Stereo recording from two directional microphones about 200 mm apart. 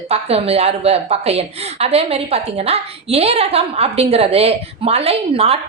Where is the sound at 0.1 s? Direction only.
30° right (ahead or behind).